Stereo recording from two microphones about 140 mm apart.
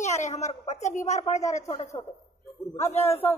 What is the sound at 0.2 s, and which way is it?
Speech, 55° left (ahead or behind).